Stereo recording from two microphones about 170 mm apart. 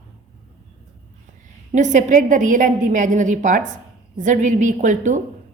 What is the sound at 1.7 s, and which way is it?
A woman's voice, 45° right (ahead or behind).